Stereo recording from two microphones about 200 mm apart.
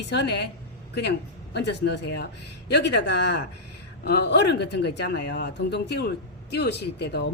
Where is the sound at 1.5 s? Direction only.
55° left (ahead or behind).